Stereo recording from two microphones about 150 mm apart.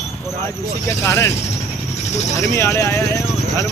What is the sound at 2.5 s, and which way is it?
Speech, 20° left (ahead or behind).